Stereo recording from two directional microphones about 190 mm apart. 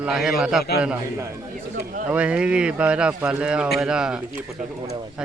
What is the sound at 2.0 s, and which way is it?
Speech, 5° right (ahead or behind).